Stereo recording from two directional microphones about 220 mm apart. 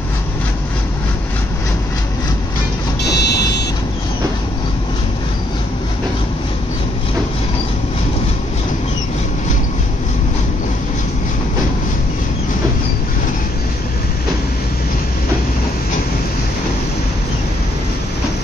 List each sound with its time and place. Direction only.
3.0 s vehicle: 50° left (ahead or behind)